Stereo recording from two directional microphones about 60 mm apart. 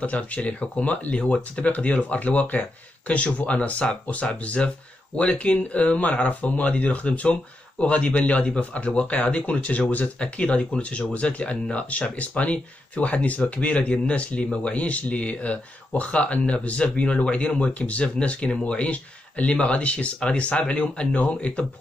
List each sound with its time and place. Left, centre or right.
0.0 s speech: left